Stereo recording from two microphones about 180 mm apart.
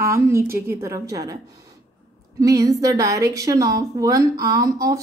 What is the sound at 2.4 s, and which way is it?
A woman's voice, 20° right (ahead or behind).